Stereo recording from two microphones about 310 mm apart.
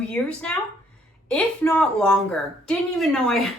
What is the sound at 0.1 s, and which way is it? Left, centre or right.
A woman's voice, centre.